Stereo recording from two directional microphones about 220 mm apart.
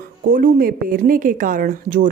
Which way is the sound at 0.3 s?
40° right (ahead or behind).